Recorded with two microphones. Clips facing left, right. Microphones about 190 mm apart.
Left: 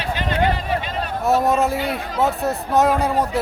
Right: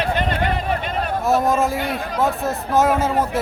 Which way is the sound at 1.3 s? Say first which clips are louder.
Left 1 dB; centre (ahead or behind).